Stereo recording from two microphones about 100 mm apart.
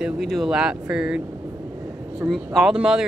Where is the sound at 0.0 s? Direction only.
Centre (ahead or behind).